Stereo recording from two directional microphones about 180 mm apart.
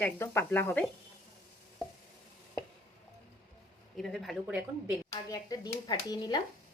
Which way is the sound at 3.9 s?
Centre (ahead or behind).